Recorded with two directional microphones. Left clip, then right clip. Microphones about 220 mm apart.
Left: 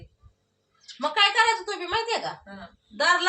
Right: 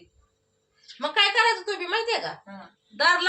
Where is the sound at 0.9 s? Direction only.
10° right (ahead or behind).